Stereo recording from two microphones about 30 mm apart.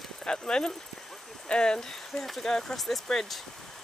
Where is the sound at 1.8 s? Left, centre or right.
Centre.